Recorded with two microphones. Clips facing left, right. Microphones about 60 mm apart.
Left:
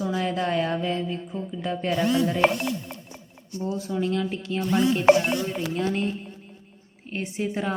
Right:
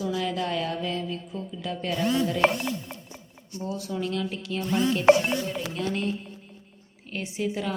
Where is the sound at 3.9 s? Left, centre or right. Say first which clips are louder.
Left 3 dB; left.